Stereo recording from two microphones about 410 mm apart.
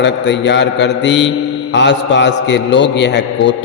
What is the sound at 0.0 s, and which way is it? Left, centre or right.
A man's voice, left.